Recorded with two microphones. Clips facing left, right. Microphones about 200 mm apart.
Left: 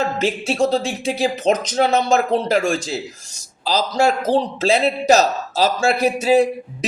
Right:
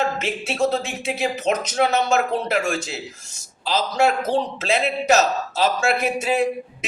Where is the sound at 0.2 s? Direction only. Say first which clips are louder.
Left 4 dB; 35° left (ahead or behind).